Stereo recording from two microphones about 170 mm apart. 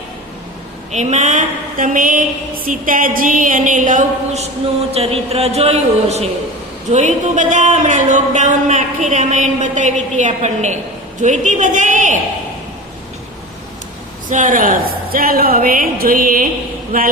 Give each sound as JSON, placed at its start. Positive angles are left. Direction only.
{"t": 0.9, "sound": "speech", "side_deg": -45}
{"t": 4.9, "sound": "a woman's voice", "side_deg": -35}
{"t": 14.3, "sound": "a woman's voice", "side_deg": -50}